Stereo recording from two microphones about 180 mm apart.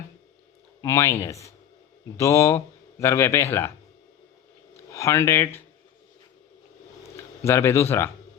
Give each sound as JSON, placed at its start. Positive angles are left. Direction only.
{"t": 0.8, "sound": "a man's voice", "side_deg": 15}
{"t": 4.9, "sound": "speech", "side_deg": 15}
{"t": 7.4, "sound": "a man's voice", "side_deg": 15}